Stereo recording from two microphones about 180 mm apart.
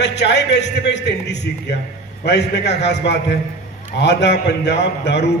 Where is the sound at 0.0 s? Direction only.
70° left (ahead or behind).